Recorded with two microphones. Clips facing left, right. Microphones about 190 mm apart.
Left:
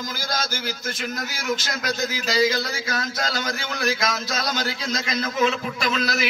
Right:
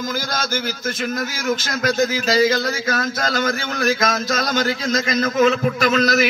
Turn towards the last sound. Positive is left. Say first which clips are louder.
# right 8 dB
turn(degrees=-45)  # may be behind; listen again after turning